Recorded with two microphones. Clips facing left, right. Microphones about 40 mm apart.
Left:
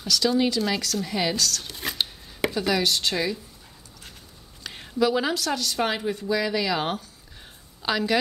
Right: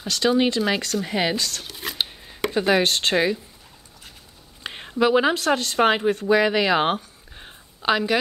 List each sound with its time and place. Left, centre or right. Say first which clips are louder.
0.0 s a woman's voice: right 2 dB; right
1.6 s speech: right 1 dB; centre
2.5 s speech: right 6 dB; right
4.6 s a woman's voice: right 3 dB; right